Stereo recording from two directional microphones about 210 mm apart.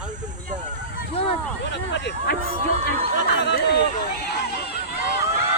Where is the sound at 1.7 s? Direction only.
55° left (ahead or behind).